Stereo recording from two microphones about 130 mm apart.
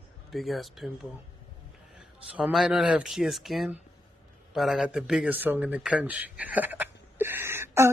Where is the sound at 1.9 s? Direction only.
5° right (ahead or behind).